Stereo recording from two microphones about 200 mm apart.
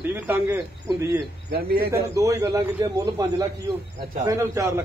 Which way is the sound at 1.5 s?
50° right (ahead or behind).